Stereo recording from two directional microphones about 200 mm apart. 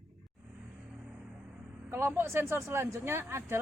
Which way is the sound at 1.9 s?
10° right (ahead or behind).